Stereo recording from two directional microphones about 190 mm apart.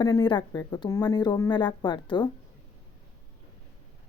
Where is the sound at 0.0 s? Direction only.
20° left (ahead or behind).